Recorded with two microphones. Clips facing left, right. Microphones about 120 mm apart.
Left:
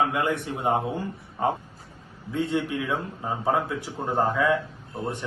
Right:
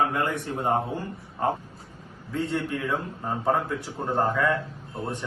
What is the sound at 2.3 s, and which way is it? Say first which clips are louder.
A man's voice: left 2 dB; 15° left (ahead or behind).